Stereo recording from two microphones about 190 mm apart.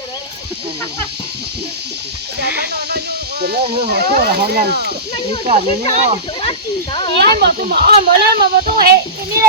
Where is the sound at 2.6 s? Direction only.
60° right (ahead or behind).